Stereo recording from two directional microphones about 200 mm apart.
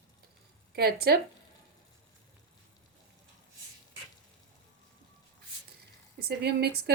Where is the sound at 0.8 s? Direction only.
50° right (ahead or behind).